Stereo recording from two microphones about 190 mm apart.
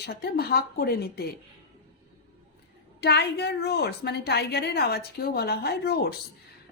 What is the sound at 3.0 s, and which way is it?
Speech, 60° left (ahead or behind).